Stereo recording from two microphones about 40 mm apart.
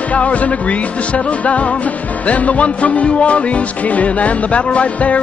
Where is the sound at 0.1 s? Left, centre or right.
Left.